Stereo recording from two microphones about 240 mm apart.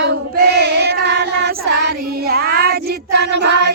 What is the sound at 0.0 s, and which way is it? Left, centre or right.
Child singing, right.